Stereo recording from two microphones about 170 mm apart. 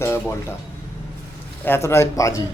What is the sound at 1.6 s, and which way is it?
Speech, 15° left (ahead or behind).